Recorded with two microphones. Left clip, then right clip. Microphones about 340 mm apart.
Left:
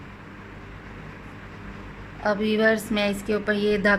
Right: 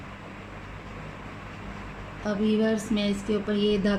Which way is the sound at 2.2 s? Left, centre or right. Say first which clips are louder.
Left 5 dB; left.